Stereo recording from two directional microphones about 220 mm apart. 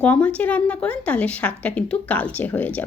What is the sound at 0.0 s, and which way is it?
A woman's voice, 5° left (ahead or behind).